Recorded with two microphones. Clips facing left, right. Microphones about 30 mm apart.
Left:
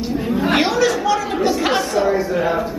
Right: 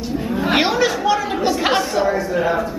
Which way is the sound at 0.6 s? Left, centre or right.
Centre.